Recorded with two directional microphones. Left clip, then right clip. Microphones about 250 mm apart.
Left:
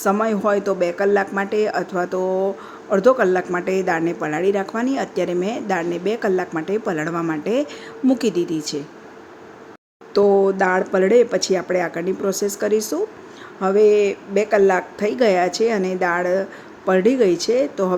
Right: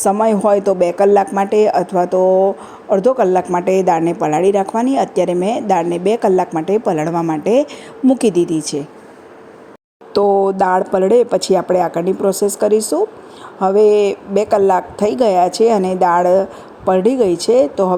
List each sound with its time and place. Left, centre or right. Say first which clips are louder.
0.0 s a woman's voice: right 6 dB; centre
10.1 s a woman's voice: right 2 dB; centre